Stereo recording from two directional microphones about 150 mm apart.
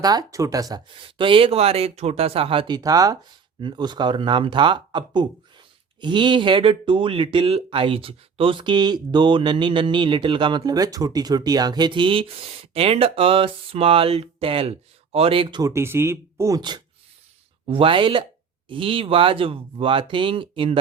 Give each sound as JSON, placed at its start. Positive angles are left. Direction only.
{"t": 0.0, "sound": "speech", "side_deg": -25}
{"t": 1.0, "sound": "speech", "side_deg": -35}
{"t": 15.7, "sound": "speech", "side_deg": -15}